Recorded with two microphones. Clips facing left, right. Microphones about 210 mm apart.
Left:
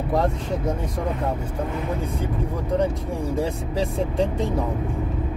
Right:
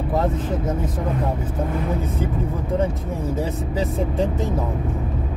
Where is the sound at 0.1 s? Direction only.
Centre (ahead or behind).